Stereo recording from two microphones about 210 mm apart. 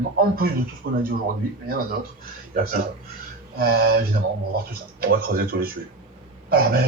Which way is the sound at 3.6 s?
45° right (ahead or behind).